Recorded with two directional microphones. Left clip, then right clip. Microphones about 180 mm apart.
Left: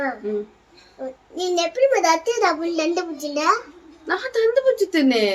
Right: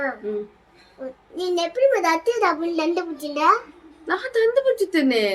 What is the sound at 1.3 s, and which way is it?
A child's voice, 10° right (ahead or behind).